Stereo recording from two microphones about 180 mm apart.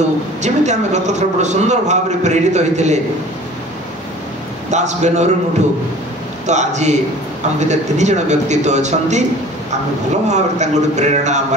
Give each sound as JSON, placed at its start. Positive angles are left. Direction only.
{"t": 0.4, "sound": "a man's voice", "side_deg": -40}
{"t": 4.6, "sound": "a man's voice", "side_deg": -40}
{"t": 6.4, "sound": "a man's voice", "side_deg": -40}
{"t": 10.2, "sound": "a man's voice", "side_deg": -40}